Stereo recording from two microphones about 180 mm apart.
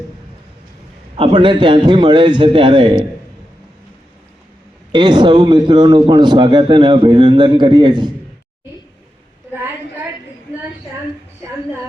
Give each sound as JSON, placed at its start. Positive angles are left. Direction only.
{"t": 1.1, "sound": "a man's voice", "side_deg": -30}
{"t": 4.9, "sound": "a man's voice", "side_deg": -25}